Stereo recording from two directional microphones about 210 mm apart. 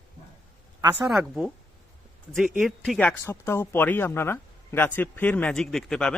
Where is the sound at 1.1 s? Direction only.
Centre (ahead or behind).